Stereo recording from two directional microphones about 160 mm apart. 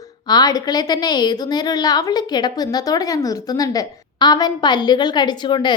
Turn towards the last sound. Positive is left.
turn(degrees=30)  # may be behind; listen again after turning